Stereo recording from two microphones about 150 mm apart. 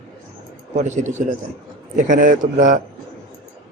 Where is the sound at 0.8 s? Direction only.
50° right (ahead or behind).